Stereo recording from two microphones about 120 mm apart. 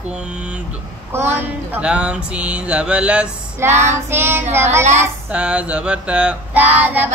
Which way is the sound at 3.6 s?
20° right (ahead or behind).